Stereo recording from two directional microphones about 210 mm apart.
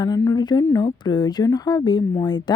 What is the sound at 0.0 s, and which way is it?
Speech, 15° left (ahead or behind).